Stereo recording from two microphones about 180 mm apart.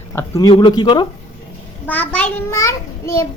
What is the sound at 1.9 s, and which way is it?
Speech, 10° left (ahead or behind).